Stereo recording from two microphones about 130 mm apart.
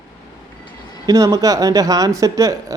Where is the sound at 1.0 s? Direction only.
30° right (ahead or behind).